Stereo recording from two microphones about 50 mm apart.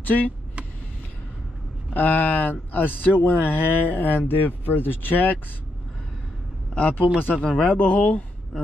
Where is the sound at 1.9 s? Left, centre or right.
Left.